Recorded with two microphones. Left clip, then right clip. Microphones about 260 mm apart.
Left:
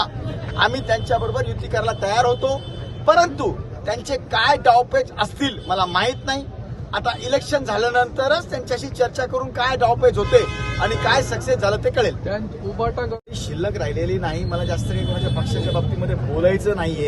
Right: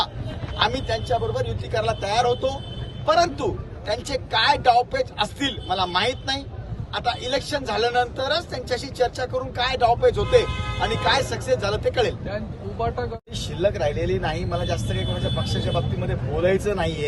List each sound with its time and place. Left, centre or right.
0.6 s speech: centre
13.5 s speech: centre